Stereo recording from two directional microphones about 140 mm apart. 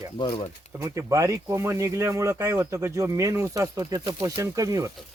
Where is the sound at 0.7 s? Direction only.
20° right (ahead or behind).